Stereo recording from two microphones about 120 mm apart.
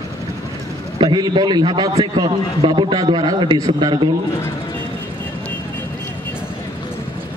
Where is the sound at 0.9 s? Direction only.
45° right (ahead or behind).